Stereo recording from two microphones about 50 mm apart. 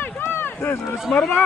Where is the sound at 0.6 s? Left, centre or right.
Left.